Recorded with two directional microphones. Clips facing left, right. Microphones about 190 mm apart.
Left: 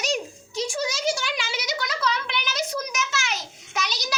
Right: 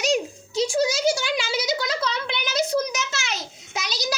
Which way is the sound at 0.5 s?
30° right (ahead or behind).